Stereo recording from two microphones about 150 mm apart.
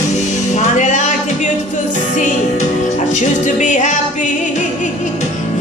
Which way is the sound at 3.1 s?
55° left (ahead or behind).